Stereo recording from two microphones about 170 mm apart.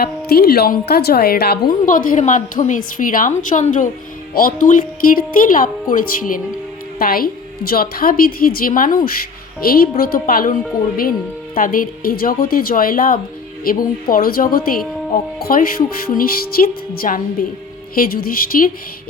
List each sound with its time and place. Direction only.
0.0 s a woman's voice: 65° left (ahead or behind)